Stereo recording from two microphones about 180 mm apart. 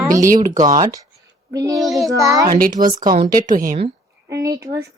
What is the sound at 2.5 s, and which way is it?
Speech, 50° right (ahead or behind).